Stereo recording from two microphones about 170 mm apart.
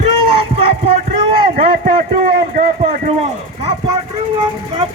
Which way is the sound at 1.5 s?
50° right (ahead or behind).